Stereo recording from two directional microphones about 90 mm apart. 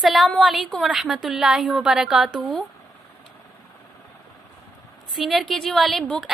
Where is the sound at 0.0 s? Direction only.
Centre (ahead or behind).